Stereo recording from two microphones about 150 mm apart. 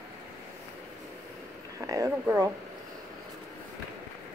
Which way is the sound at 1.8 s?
20° right (ahead or behind).